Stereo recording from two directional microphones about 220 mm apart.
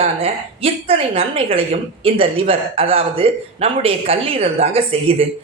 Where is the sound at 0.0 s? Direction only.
25° right (ahead or behind).